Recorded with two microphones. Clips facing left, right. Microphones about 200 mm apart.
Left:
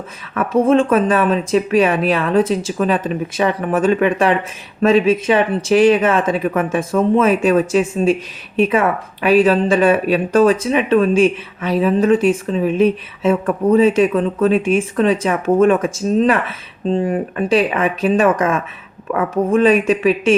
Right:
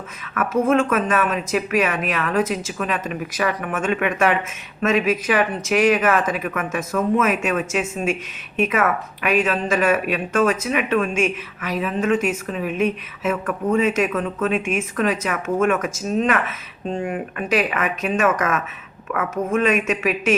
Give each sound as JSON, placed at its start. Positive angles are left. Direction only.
{"t": 0.3, "sound": "speech", "side_deg": 30}